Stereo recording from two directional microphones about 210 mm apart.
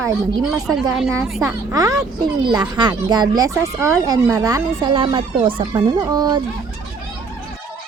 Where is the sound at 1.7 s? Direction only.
15° right (ahead or behind).